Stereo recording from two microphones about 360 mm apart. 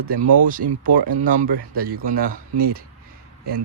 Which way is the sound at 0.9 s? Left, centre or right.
Right.